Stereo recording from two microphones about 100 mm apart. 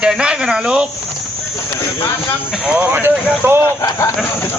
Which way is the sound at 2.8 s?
20° right (ahead or behind).